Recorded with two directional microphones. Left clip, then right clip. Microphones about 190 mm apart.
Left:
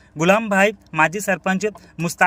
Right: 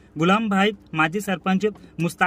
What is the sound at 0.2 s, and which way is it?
Speech, 15° left (ahead or behind).